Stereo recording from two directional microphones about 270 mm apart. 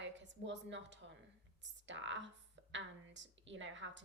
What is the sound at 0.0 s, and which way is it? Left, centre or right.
A woman's voice, right.